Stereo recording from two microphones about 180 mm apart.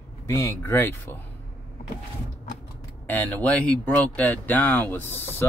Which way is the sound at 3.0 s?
10° left (ahead or behind).